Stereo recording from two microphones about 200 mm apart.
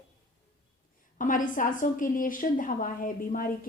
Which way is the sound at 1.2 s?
40° left (ahead or behind).